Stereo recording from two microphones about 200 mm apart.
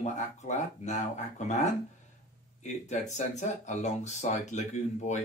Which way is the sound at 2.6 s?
35° left (ahead or behind).